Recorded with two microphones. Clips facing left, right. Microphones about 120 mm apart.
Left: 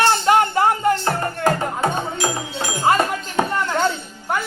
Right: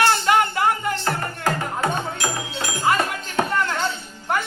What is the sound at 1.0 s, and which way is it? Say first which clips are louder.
Music: left 4 dB; 25° left (ahead or behind).